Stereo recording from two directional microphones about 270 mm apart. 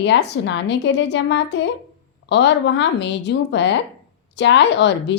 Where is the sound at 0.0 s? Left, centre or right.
Left.